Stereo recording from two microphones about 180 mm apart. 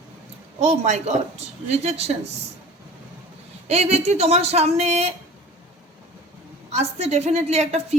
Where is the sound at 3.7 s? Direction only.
35° right (ahead or behind).